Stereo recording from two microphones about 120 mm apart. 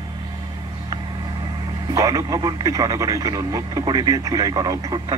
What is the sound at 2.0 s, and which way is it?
A man's voice, 30° right (ahead or behind).